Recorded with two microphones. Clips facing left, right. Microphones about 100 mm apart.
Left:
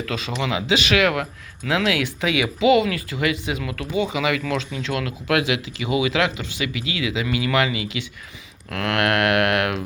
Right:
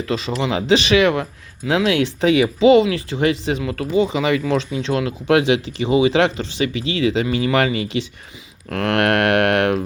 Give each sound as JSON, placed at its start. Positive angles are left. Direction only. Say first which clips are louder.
{"t": 0.1, "sound": "speech", "louder": "right 5 dB", "side_deg": -30}